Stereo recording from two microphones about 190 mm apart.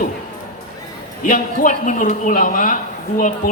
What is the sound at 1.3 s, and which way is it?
A woman's voice, 45° left (ahead or behind).